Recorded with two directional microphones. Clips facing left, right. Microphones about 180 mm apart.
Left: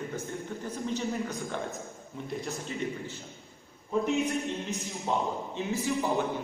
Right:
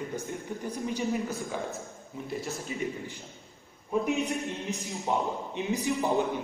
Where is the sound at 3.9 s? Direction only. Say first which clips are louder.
Even; 10° right (ahead or behind).